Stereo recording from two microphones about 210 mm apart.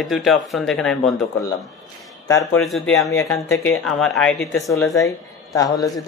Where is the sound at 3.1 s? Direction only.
15° left (ahead or behind).